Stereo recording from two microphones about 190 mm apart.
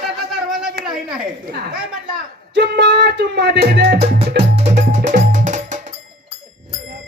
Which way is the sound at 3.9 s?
30° right (ahead or behind).